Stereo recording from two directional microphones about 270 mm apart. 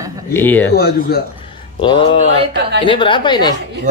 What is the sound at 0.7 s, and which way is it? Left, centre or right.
Speech, left.